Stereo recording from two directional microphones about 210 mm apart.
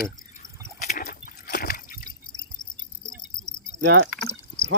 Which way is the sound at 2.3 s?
20° left (ahead or behind).